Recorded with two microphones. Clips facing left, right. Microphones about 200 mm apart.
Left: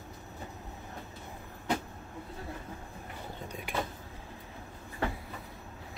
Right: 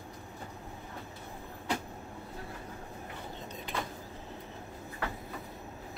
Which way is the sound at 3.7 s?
10° left (ahead or behind).